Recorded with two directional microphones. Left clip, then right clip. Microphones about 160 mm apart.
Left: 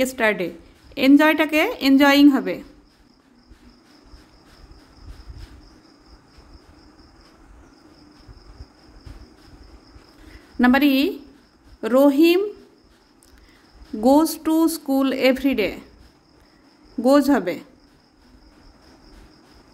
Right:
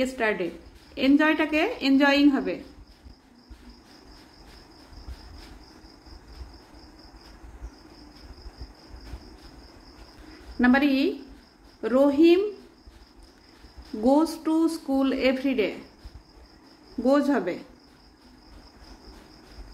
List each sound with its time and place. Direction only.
0.0 s speech: 75° left (ahead or behind)
10.6 s speech: 75° left (ahead or behind)
14.0 s speech: 70° left (ahead or behind)
17.0 s speech: 85° left